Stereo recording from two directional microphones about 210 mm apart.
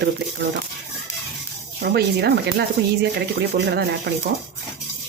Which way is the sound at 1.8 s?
50° right (ahead or behind).